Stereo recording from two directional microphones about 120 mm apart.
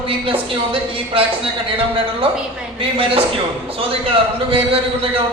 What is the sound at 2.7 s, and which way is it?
Speech, 50° right (ahead or behind).